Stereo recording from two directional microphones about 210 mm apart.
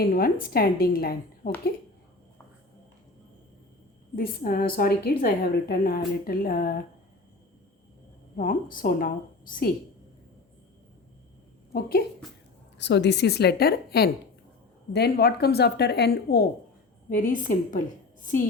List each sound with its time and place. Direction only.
0.0 s a woman's voice: 45° left (ahead or behind)
4.1 s a woman's voice: 45° left (ahead or behind)
8.4 s a woman's voice: 40° left (ahead or behind)
11.7 s a woman's voice: 45° left (ahead or behind)
12.8 s a woman's voice: 55° left (ahead or behind); by 18.4 s 40° left (ahead or behind)